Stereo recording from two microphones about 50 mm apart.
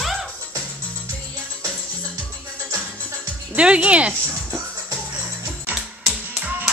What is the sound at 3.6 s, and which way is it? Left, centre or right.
Speech, right.